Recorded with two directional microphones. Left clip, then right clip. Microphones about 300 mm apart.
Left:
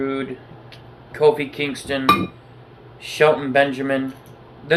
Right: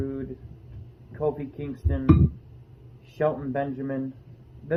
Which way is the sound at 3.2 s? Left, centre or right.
Centre.